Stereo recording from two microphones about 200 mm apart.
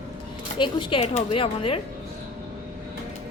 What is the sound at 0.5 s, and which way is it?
Speech, 25° left (ahead or behind).